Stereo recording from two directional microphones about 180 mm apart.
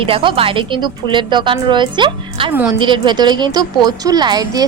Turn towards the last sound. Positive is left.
turn(degrees=-25)  # may be behind; listen again after turning